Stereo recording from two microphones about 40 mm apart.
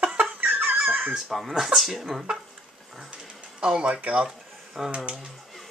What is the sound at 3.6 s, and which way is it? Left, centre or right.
Speech, right.